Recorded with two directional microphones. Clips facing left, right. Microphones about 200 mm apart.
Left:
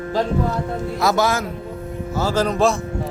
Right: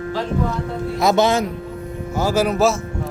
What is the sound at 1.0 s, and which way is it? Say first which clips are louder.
Speech: right 3 dB; 20° right (ahead or behind).